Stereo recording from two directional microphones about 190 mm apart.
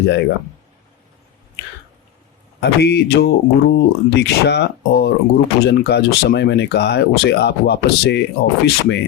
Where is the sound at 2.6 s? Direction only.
60° left (ahead or behind).